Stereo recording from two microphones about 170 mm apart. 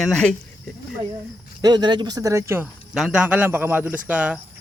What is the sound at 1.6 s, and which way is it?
Speech, 25° right (ahead or behind).